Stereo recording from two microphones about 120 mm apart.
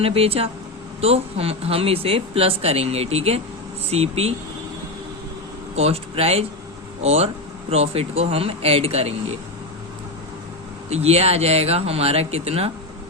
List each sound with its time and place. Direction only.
0.0 s speech: 55° right (ahead or behind)
5.7 s speech: 60° right (ahead or behind)
10.8 s speech: 65° right (ahead or behind)